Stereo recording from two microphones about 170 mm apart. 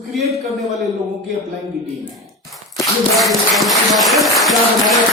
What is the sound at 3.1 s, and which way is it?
Speech, centre (ahead or behind).